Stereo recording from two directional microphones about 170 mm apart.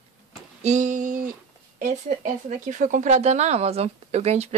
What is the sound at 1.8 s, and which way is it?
Speech, 50° right (ahead or behind).